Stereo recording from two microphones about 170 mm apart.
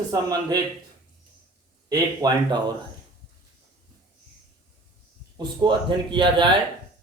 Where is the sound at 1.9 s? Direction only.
20° right (ahead or behind).